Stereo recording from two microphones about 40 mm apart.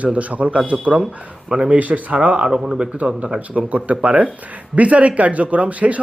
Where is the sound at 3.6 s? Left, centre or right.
Right.